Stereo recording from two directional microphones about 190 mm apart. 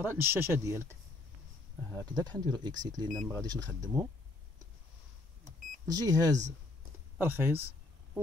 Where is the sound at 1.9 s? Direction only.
20° right (ahead or behind).